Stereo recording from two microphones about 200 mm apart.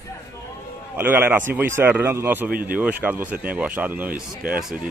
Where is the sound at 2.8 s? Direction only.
10° right (ahead or behind).